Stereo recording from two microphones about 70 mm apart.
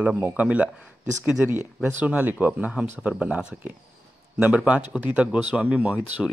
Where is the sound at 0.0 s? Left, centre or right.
Centre.